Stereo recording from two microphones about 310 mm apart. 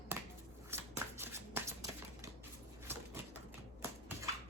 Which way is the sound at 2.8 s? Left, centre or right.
Centre.